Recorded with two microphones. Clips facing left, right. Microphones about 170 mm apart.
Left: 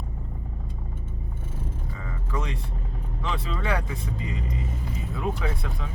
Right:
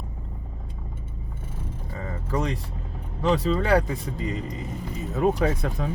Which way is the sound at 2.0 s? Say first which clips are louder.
Right 6 dB; 40° right (ahead or behind).